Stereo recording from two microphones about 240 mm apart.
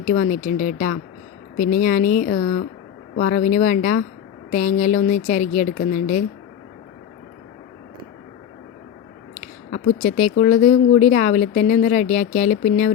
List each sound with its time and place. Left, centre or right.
0.0 s speech: left
9.3 s speech: left